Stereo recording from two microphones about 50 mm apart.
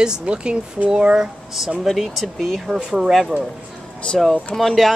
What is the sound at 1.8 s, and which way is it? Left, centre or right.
Speech, centre.